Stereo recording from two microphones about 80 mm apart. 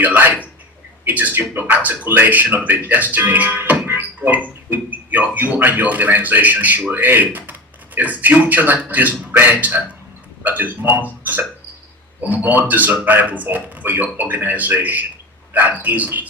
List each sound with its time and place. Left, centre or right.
0.0 s speech: right